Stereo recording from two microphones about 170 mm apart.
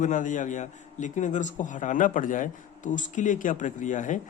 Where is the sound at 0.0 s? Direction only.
50° left (ahead or behind).